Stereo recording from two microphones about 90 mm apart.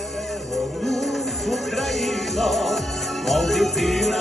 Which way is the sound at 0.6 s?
Centre (ahead or behind).